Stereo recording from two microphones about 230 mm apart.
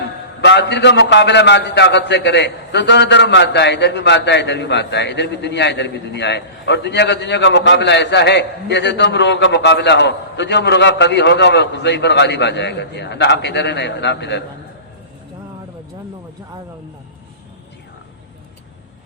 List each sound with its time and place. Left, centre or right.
0.4 s a man's voice: left